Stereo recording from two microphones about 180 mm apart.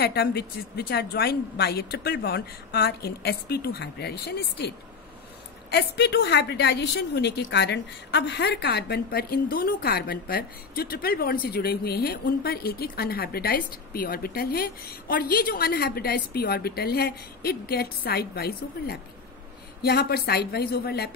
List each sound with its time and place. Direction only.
0.0 s a woman's voice: 60° left (ahead or behind)
5.7 s a woman's voice: 70° left (ahead or behind)